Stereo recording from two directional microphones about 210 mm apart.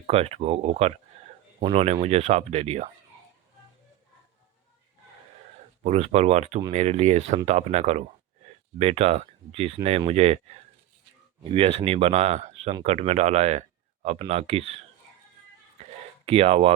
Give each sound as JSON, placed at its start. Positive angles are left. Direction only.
{"t": 0.1, "sound": "speech", "side_deg": -30}
{"t": 5.8, "sound": "speech", "side_deg": -30}
{"t": 15.8, "sound": "a sound", "side_deg": -30}